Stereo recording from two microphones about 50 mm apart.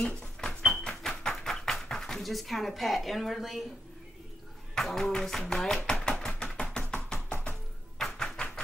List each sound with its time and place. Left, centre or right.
0.0 s music: centre
4.7 s speech: centre
5.5 s chopping: centre
8.0 s a sound: centre